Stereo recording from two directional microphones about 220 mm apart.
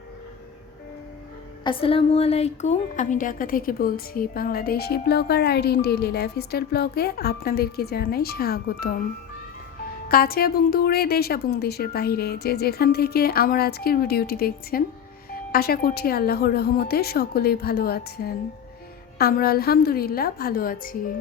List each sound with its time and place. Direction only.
1.6 s a woman's voice: 25° left (ahead or behind); by 9.0 s 45° left (ahead or behind)
10.1 s a woman's voice: 45° left (ahead or behind)